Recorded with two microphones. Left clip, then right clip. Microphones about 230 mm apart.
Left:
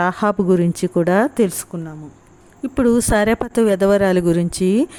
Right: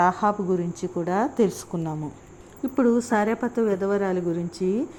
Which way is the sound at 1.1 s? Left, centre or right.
Left.